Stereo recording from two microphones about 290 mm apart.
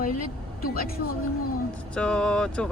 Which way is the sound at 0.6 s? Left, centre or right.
Left.